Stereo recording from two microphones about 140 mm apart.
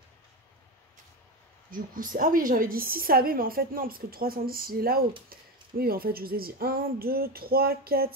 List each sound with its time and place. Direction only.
1.7 s a woman's voice: 75° right (ahead or behind)